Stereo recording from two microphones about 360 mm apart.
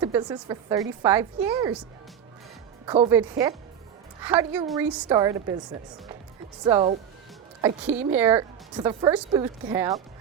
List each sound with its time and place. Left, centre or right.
0.0 s a woman's voice: centre